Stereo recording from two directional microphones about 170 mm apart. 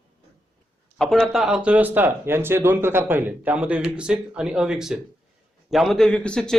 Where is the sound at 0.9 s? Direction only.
Centre (ahead or behind).